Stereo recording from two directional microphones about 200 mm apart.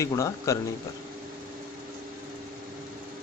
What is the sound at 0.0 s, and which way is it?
Speech, 15° left (ahead or behind).